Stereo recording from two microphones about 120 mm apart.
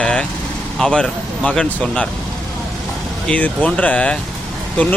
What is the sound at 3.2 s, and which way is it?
Speech, 10° left (ahead or behind).